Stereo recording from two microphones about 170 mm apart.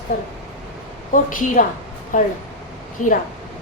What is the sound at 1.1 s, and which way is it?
A woman's voice, 50° left (ahead or behind).